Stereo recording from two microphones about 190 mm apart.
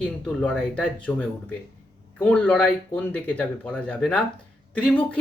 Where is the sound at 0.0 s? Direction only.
5° left (ahead or behind).